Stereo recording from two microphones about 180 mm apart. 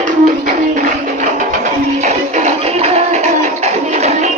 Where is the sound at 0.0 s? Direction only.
45° right (ahead or behind).